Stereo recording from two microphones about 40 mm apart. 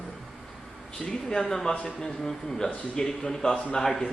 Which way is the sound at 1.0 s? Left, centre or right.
Left.